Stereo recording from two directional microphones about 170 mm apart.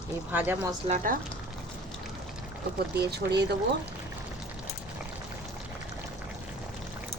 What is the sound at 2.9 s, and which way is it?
Speech, 75° right (ahead or behind).